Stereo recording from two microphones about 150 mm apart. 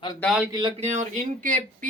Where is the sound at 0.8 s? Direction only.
50° right (ahead or behind).